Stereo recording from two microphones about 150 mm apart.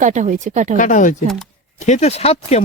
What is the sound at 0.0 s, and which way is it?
Speech, 55° right (ahead or behind).